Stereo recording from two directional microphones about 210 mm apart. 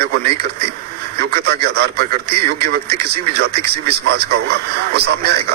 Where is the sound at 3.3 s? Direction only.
50° right (ahead or behind).